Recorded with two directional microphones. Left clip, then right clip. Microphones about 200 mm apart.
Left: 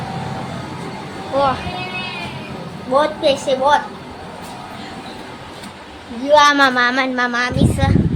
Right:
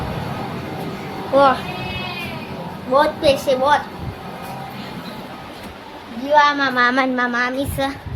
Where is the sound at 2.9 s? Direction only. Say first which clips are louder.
Even; 10° right (ahead or behind).